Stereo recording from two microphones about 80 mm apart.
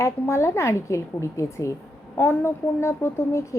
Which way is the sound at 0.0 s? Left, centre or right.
Left.